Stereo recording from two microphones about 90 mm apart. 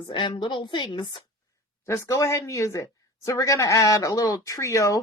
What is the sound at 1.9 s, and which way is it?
Speech, 35° left (ahead or behind).